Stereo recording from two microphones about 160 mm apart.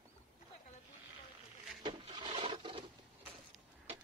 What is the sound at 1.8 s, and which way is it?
Wood, 25° right (ahead or behind).